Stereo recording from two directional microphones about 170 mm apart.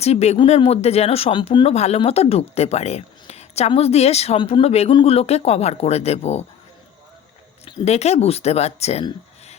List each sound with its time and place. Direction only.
0.0 s speech: 40° left (ahead or behind)
7.6 s speech: 40° left (ahead or behind)